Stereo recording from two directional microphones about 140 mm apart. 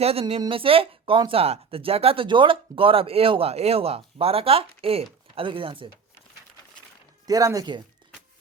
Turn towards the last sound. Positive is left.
turn(degrees=-30)  # may be behind; listen again after turning